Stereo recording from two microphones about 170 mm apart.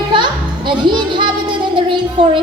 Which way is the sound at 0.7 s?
25° right (ahead or behind).